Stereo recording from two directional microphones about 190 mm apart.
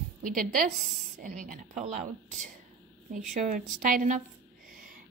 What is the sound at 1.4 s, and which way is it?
Speech, 45° right (ahead or behind).